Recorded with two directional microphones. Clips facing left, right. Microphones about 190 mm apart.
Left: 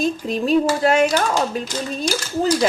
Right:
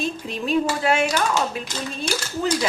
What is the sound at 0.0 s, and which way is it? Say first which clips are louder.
Speech: left 6 dB; 40° left (ahead or behind).